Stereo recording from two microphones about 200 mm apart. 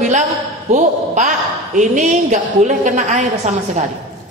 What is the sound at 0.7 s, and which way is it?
A man's voice, 35° right (ahead or behind).